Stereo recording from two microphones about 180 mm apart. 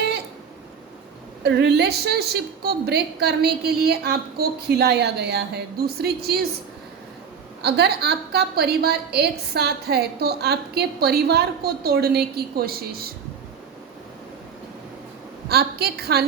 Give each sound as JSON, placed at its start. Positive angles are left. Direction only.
{"t": 1.5, "sound": "a woman's voice", "side_deg": -65}
{"t": 7.6, "sound": "a woman's voice", "side_deg": -65}
{"t": 15.4, "sound": "a woman's voice", "side_deg": -60}